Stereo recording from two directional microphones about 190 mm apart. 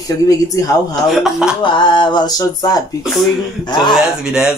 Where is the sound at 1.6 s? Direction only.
25° left (ahead or behind).